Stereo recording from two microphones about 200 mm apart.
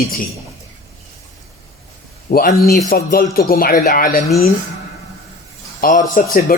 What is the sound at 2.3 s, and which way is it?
Speech, 50° left (ahead or behind).